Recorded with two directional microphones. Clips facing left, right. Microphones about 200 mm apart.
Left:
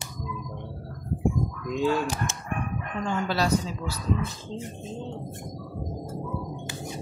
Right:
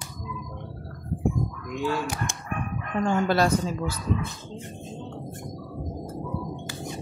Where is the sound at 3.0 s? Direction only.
50° right (ahead or behind).